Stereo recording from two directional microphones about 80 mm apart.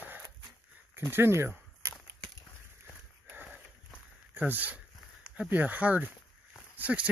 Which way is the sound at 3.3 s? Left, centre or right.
Right.